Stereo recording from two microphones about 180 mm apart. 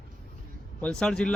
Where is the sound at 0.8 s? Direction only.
5° left (ahead or behind).